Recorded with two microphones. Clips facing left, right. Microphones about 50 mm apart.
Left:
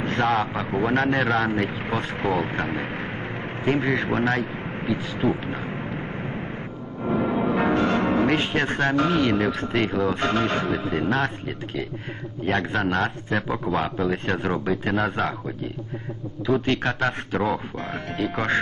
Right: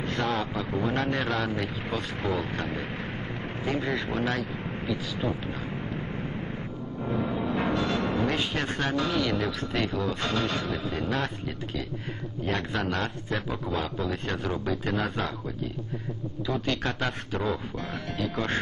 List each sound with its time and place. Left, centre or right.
0.0 s vehicle: left
0.3 s speech: left
4.8 s vehicle: left
7.0 s music: left
7.5 s speech: left